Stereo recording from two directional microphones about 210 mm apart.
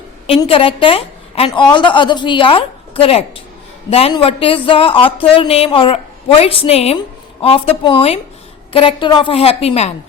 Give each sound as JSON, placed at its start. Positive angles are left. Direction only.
{"t": 0.3, "sound": "speech", "side_deg": 25}